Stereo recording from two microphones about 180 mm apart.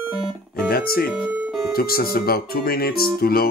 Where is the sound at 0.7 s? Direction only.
55° left (ahead or behind).